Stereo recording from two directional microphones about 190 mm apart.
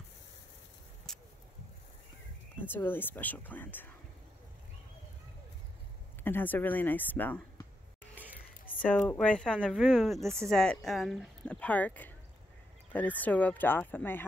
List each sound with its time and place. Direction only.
1.1 s vehicle: centre (ahead or behind)
2.7 s speech: 10° left (ahead or behind)
6.2 s speech: 10° left (ahead or behind)
8.6 s a sound: 10° left (ahead or behind)
9.1 s speech: 5° left (ahead or behind)
13.2 s speech: 10° left (ahead or behind)